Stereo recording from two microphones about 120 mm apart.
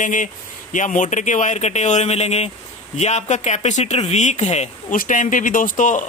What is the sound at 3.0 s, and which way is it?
Speech, 75° left (ahead or behind).